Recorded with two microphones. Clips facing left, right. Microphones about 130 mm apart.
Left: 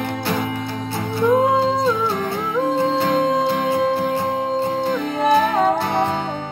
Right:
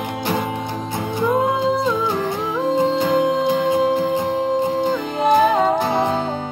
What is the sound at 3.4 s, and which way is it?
Music, 20° right (ahead or behind).